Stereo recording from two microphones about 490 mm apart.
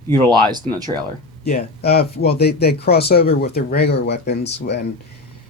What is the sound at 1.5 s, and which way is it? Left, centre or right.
Speech, centre.